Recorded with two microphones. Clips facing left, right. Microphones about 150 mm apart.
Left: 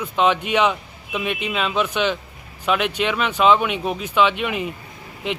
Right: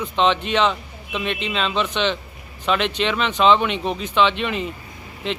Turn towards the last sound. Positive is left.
turn(degrees=15)  # may be behind; listen again after turning